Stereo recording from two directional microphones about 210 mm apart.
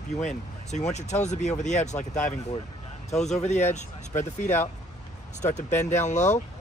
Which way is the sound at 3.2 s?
35° left (ahead or behind).